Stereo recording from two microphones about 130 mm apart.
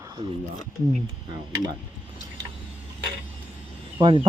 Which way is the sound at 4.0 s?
40° right (ahead or behind).